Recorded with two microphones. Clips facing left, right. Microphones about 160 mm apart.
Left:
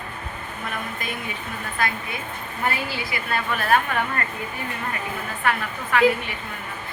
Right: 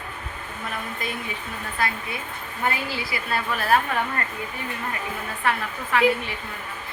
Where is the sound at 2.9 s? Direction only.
30° right (ahead or behind).